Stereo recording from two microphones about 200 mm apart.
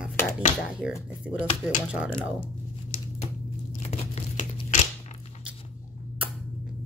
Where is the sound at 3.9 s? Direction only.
35° left (ahead or behind).